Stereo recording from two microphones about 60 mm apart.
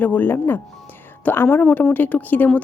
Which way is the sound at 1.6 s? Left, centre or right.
Left.